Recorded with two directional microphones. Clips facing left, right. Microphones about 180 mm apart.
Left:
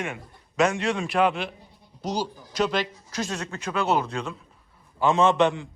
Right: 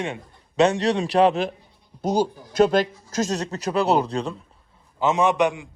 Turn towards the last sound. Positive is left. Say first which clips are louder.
# even
turn(degrees=-15)  # may be behind; listen again after turning